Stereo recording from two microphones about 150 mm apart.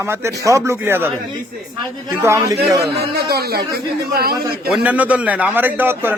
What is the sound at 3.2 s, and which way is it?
Speech, 90° right.